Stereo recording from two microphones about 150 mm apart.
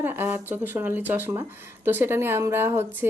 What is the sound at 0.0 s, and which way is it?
A woman's voice, 15° right (ahead or behind).